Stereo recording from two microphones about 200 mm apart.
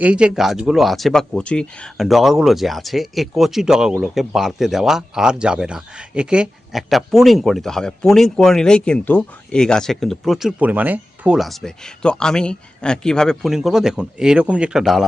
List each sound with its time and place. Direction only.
0.0 s speech: 5° right (ahead or behind)